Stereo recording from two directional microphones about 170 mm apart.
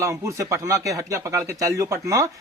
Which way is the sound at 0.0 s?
15° right (ahead or behind).